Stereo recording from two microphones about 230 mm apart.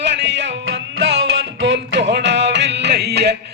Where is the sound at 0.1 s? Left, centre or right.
Right.